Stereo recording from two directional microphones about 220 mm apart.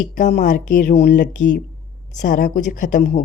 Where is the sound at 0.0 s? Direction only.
35° left (ahead or behind).